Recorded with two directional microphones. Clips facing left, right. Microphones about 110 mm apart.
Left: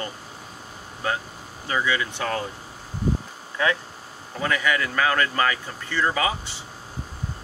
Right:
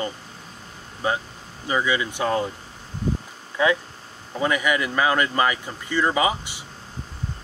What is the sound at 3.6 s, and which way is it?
Speech, 15° right (ahead or behind).